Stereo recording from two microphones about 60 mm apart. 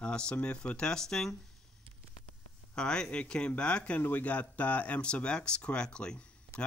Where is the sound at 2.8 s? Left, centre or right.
Centre.